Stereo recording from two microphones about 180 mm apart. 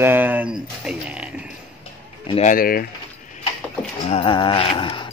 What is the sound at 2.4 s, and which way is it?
Speech, 55° left (ahead or behind).